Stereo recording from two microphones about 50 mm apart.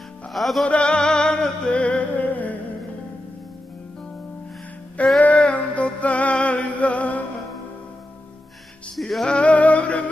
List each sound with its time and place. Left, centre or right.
0.3 s music: centre
0.7 s music: left
1.7 s music: left
2.1 s music: left
5.2 s music: left
8.9 s music: centre
9.2 s music: left